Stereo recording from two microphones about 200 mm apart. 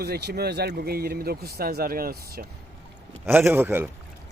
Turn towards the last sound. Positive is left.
turn(degrees=-10)  # may be behind; listen again after turning